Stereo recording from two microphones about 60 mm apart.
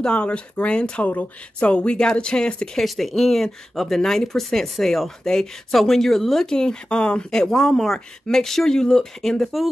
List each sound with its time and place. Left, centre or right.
0.0 s speech: centre
2.8 s speech: centre